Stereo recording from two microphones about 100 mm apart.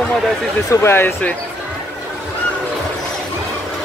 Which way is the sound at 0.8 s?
20° left (ahead or behind).